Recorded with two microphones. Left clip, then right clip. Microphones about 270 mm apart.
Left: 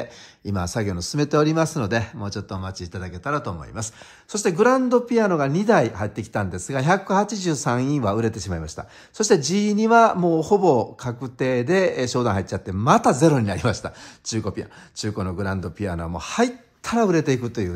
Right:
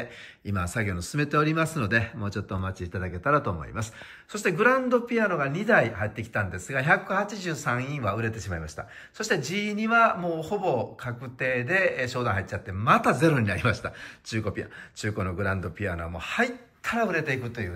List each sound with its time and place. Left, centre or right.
0.5 s a man's voice: centre